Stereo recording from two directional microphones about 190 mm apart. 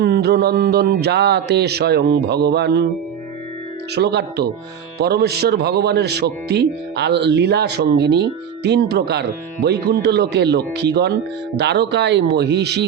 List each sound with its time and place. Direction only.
0.0 s a man's voice: 60° right (ahead or behind)
3.9 s a man's voice: 60° right (ahead or behind)